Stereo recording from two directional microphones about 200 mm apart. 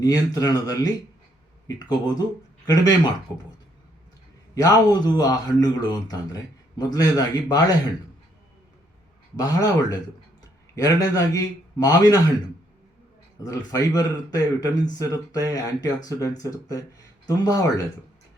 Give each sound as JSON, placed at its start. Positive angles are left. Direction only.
{"t": 0.0, "sound": "a man's voice", "side_deg": 20}
{"t": 4.5, "sound": "speech", "side_deg": 20}
{"t": 9.3, "sound": "a man's voice", "side_deg": 20}
{"t": 13.4, "sound": "a man's voice", "side_deg": 20}